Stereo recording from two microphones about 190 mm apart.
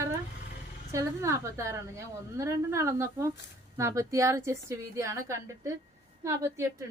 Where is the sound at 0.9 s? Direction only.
15° right (ahead or behind).